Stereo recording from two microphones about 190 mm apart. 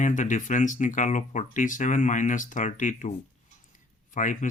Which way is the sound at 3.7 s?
40° left (ahead or behind).